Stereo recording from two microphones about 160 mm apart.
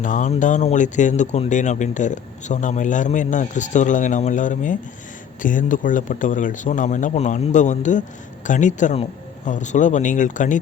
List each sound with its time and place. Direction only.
0.0 s speech: 50° left (ahead or behind)